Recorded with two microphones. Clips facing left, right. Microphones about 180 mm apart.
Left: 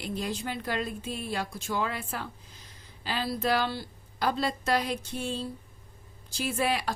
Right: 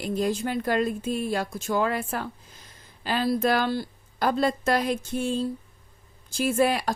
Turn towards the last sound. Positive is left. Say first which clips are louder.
# right 6 dB
turn(degrees=-45)  # may be behind; listen again after turning